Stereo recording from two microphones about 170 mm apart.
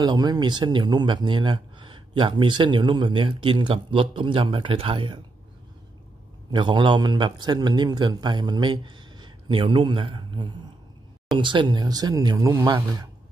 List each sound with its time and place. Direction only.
0.0 s speech: 25° right (ahead or behind)
6.5 s speech: 30° right (ahead or behind)